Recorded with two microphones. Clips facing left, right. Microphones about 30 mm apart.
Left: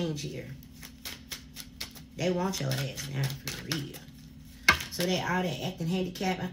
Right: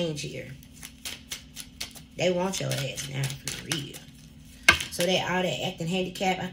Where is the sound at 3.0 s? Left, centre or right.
Right.